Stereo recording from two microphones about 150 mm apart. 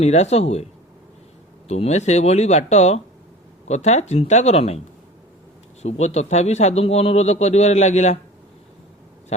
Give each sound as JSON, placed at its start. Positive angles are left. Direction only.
{"t": 0.0, "sound": "a man's voice", "side_deg": 45}
{"t": 1.6, "sound": "a man's voice", "side_deg": 45}
{"t": 5.8, "sound": "a man's voice", "side_deg": 45}